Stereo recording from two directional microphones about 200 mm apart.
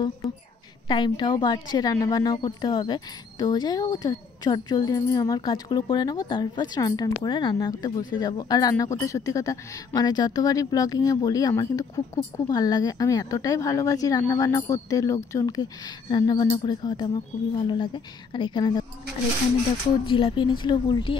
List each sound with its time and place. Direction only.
0.2 s a sound: centre (ahead or behind)
0.8 s a woman's voice: 25° left (ahead or behind)
20.1 s a woman's voice: 25° left (ahead or behind)